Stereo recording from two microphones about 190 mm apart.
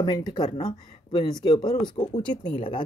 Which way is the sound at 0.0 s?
20° left (ahead or behind).